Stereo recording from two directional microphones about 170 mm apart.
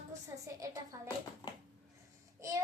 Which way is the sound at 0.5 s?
20° right (ahead or behind).